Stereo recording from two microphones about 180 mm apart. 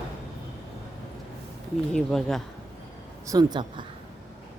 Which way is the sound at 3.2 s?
20° right (ahead or behind).